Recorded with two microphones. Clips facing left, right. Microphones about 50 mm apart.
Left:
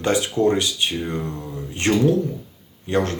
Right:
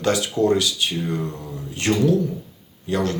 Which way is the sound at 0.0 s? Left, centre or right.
Left.